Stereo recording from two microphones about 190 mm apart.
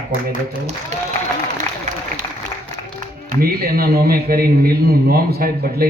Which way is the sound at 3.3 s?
50° right (ahead or behind).